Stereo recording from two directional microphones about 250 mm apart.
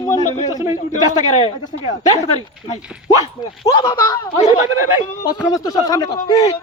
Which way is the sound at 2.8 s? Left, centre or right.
Centre.